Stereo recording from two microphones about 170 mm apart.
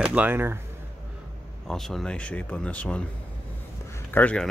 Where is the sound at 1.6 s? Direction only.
Centre (ahead or behind).